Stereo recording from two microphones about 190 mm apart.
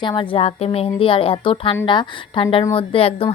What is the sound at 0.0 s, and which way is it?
Speech, 25° left (ahead or behind).